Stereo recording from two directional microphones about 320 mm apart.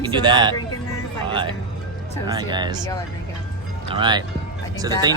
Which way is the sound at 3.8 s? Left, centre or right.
Centre.